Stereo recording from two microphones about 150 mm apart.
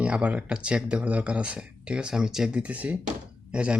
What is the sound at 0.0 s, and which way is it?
Speech, 10° right (ahead or behind).